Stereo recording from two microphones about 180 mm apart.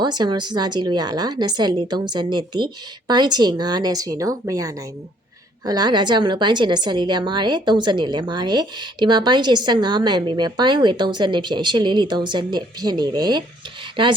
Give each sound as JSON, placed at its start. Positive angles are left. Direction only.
{"t": 0.0, "sound": "a woman's voice", "side_deg": -25}